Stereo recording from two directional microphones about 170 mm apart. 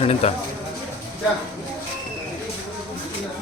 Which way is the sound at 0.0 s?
40° left (ahead or behind).